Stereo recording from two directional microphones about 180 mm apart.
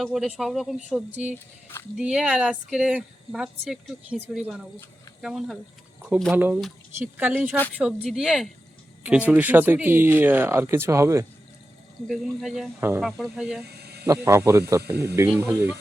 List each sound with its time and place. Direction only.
0.0 s speech: centre (ahead or behind)
1.6 s speech: 15° left (ahead or behind)
2.0 s speech: 5° right (ahead or behind)
12.0 s speech: centre (ahead or behind)